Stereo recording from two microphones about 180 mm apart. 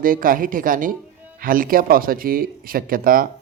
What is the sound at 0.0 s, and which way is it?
Speech, 50° right (ahead or behind).